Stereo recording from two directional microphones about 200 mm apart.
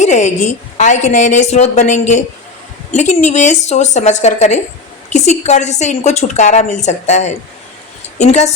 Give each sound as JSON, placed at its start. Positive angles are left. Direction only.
{"t": 0.0, "sound": "a woman's voice", "side_deg": 35}